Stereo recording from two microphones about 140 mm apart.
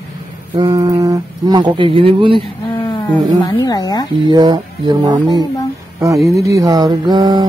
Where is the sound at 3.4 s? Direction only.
25° left (ahead or behind).